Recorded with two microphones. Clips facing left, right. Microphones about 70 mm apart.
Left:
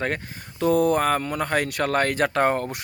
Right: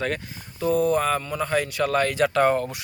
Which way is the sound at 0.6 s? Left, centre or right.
Left.